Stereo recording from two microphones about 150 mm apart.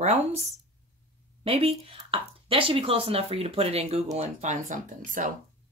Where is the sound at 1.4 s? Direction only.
40° right (ahead or behind); by 5.3 s 60° right (ahead or behind).